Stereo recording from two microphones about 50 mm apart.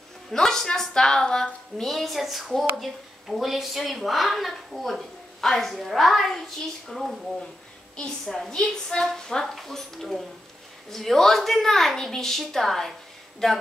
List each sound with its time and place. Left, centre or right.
0.3 s a woman's voice: centre